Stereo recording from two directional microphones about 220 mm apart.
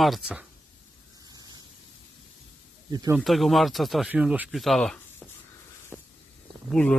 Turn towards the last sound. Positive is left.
turn(degrees=5)  # may be behind; listen again after turning